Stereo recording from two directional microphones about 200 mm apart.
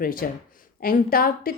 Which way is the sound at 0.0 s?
45° left (ahead or behind).